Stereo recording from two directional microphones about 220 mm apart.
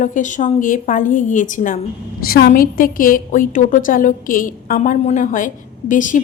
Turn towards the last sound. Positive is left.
turn(degrees=35)  # may be behind; listen again after turning